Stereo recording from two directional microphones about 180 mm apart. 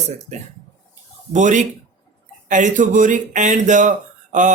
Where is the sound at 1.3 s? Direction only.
45° right (ahead or behind).